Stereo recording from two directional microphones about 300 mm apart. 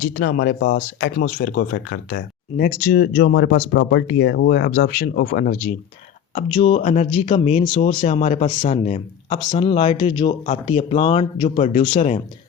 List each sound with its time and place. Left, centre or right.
0.0 s speech: left